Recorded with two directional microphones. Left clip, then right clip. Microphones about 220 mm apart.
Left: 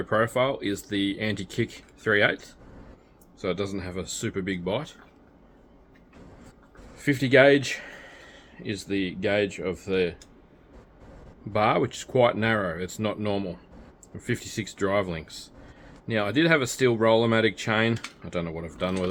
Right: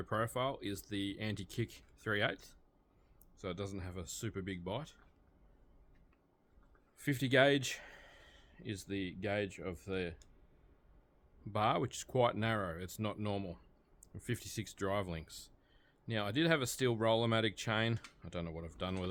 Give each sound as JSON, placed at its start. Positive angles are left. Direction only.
{"t": 0.0, "sound": "speech", "side_deg": -60}
{"t": 6.9, "sound": "speech", "side_deg": -60}
{"t": 11.5, "sound": "speech", "side_deg": -60}